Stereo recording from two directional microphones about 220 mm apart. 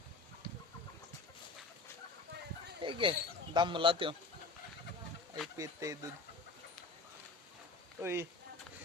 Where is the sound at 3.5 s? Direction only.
20° right (ahead or behind).